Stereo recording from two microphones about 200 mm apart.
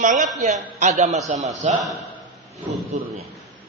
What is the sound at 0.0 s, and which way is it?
A man's voice, 40° right (ahead or behind).